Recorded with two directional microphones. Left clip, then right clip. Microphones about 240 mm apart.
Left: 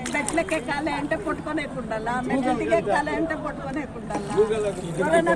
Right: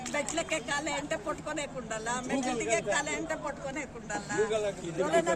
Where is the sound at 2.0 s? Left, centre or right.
Right.